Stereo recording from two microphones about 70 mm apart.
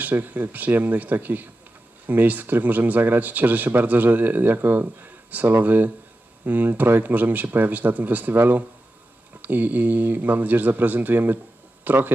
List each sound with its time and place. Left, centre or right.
0.0 s speech: right